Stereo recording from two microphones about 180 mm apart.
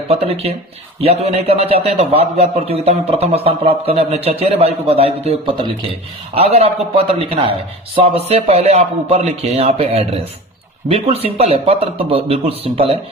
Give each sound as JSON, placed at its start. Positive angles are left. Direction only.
{"t": 0.1, "sound": "a man's voice", "side_deg": -35}